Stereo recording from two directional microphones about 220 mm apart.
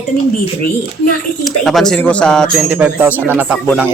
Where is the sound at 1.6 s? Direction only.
Centre (ahead or behind).